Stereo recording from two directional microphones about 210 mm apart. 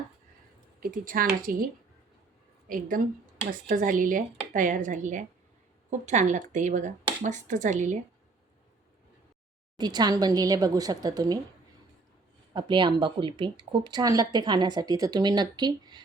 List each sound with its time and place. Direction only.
0.8 s speech: 45° right (ahead or behind)
2.6 s speech: 40° right (ahead or behind)
9.7 s speech: 20° right (ahead or behind)
12.5 s speech: 25° right (ahead or behind)